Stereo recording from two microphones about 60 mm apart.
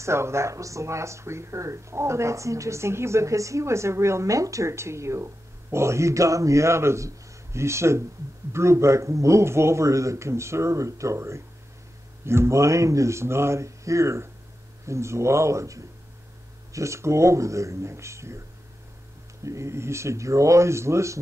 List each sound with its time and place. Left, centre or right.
0.0 s a man's voice: right
19.4 s a man's voice: right